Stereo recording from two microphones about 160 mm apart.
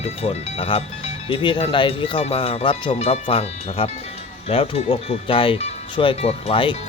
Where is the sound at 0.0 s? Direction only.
40° left (ahead or behind).